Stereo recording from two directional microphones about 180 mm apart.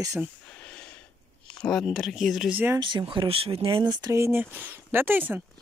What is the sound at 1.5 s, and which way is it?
Speech, 5° left (ahead or behind).